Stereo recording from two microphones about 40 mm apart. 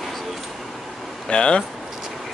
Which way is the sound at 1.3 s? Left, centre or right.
Left.